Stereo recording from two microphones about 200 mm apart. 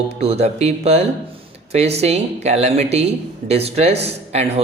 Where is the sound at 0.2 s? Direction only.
30° right (ahead or behind).